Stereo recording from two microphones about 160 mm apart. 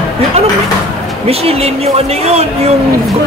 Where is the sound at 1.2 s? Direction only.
40° right (ahead or behind).